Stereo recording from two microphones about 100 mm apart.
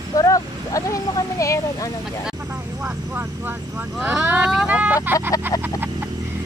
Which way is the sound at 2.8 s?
20° right (ahead or behind).